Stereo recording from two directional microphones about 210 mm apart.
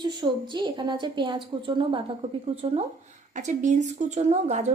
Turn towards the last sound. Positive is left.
turn(degrees=-30)  # may be behind; listen again after turning